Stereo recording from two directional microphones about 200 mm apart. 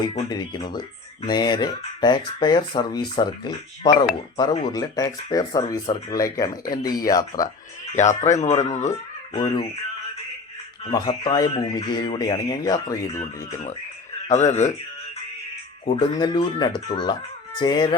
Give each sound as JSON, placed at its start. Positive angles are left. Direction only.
{"t": 0.1, "sound": "speech", "side_deg": 20}
{"t": 7.9, "sound": "speech", "side_deg": 35}
{"t": 8.9, "sound": "speech", "side_deg": 20}
{"t": 10.9, "sound": "speech", "side_deg": 20}
{"t": 14.3, "sound": "speech", "side_deg": 35}
{"t": 16.0, "sound": "speech", "side_deg": 20}